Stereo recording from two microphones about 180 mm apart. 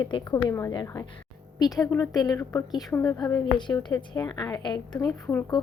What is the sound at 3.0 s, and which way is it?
A woman's voice, 20° left (ahead or behind).